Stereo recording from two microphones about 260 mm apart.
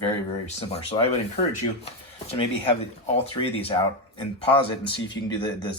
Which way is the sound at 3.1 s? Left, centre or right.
Left.